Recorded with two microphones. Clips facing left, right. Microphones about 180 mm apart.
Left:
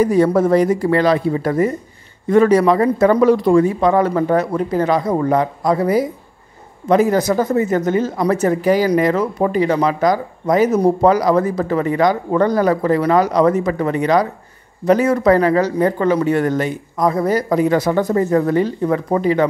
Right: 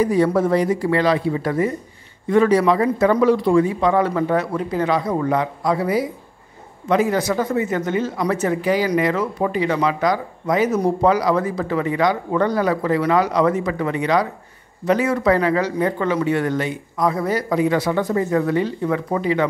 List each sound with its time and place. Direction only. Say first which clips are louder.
0.0 s speech: left 3 dB; 45° left (ahead or behind)